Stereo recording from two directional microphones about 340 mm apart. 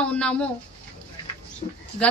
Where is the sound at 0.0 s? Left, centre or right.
Centre.